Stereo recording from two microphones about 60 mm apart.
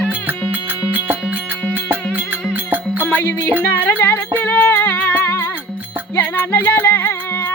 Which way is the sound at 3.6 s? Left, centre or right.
Left.